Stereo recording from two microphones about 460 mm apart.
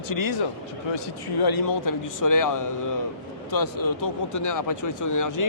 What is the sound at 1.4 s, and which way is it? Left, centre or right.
Speech, left.